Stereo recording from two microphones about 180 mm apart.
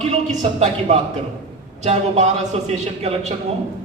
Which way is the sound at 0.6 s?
40° right (ahead or behind).